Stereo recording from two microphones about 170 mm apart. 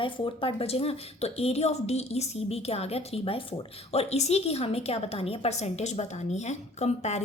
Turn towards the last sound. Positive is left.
turn(degrees=40)  # may be behind; listen again after turning